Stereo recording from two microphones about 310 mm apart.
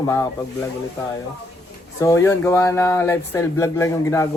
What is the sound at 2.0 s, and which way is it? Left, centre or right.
Speech, centre.